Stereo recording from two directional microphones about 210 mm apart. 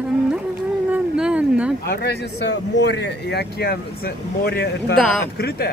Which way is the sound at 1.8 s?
50° left (ahead or behind).